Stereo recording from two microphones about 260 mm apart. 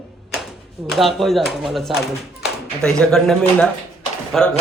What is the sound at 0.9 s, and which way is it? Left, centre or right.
Speech, centre.